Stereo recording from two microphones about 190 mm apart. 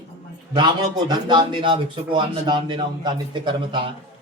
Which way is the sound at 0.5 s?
25° right (ahead or behind).